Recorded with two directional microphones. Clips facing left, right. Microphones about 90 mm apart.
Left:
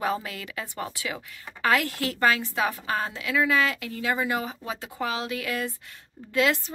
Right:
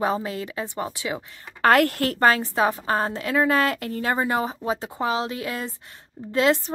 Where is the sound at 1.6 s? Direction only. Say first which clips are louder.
Right 6 dB; 50° right (ahead or behind); by 6.6 s 35° right (ahead or behind).